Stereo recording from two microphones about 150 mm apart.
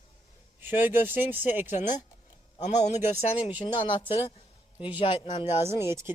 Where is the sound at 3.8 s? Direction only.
35° left (ahead or behind).